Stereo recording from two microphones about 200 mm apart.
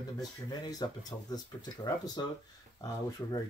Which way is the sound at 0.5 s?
20° left (ahead or behind).